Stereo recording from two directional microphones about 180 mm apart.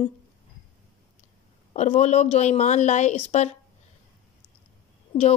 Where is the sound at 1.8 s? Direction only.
40° left (ahead or behind).